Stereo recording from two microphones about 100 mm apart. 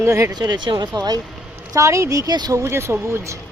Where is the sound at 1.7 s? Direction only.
30° right (ahead or behind).